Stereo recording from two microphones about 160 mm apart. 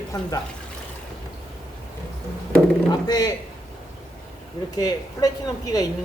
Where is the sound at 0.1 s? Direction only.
20° left (ahead or behind).